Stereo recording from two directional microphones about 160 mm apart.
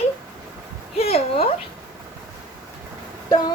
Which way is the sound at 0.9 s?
40° left (ahead or behind).